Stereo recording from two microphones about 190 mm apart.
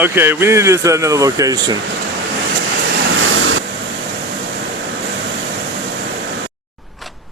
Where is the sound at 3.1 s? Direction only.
90° right.